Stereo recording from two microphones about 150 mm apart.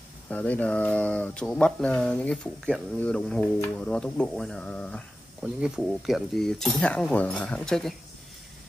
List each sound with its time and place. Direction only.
0.3 s speech: 10° left (ahead or behind)
5.4 s speech: 5° right (ahead or behind)